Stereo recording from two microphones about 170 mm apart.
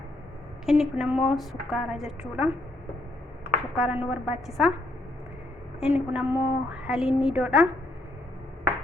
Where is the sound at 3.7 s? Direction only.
5° right (ahead or behind).